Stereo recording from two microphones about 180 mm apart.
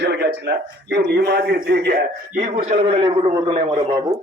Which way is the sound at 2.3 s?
45° right (ahead or behind).